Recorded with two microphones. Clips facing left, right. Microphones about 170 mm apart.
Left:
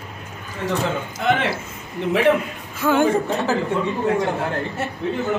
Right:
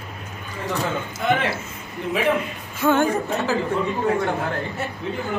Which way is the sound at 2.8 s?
10° right (ahead or behind).